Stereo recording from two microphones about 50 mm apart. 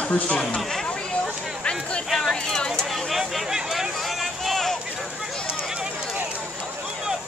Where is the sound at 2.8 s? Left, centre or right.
Centre.